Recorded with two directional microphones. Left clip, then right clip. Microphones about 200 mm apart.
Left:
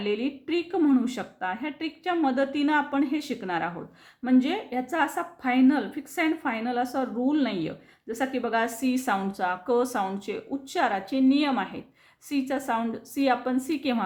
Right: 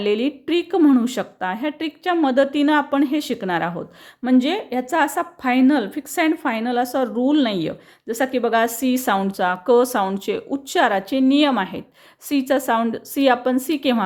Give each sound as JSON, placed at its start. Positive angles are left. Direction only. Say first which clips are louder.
{"t": 0.0, "sound": "a woman's voice", "louder": "right 8 dB", "side_deg": -40}